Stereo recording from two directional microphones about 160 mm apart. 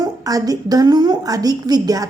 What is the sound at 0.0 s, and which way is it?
Speech, 20° right (ahead or behind).